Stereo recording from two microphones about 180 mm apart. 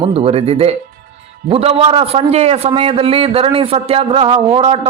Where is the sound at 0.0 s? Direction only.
35° right (ahead or behind).